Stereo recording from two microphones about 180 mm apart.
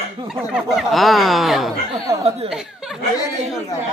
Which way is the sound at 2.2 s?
35° right (ahead or behind).